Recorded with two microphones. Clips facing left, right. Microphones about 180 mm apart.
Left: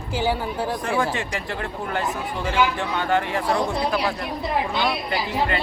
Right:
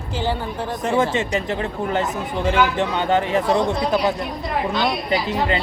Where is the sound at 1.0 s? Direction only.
20° right (ahead or behind).